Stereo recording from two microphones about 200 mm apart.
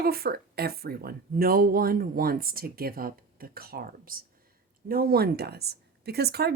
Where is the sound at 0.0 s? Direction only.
50° right (ahead or behind).